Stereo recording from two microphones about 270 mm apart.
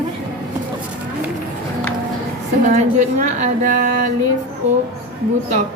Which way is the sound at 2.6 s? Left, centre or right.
Right.